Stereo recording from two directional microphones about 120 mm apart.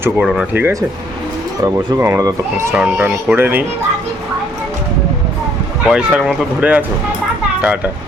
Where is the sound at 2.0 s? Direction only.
20° right (ahead or behind).